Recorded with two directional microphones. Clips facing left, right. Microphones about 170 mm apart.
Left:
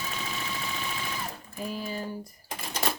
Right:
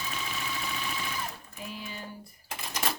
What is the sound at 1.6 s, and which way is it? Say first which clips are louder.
Speech: left 7 dB; 40° left (ahead or behind).